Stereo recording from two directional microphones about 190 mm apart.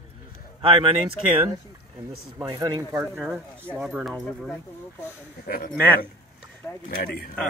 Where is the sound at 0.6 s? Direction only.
30° right (ahead or behind).